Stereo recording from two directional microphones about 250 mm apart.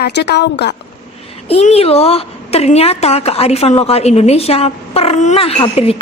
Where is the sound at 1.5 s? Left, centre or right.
Left.